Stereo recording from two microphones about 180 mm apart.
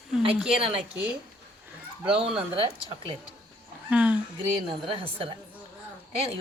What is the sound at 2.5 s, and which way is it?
Speech, 30° right (ahead or behind).